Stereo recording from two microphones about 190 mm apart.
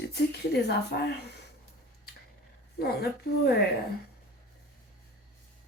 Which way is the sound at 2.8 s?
55° left (ahead or behind).